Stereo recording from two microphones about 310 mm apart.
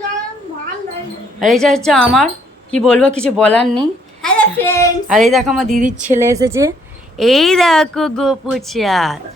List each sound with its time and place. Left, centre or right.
1.5 s speech: centre
3.6 s speech: centre
4.2 s a sound: centre
5.0 s speech: centre
5.7 s speech: right
6.1 s a woman's voice: centre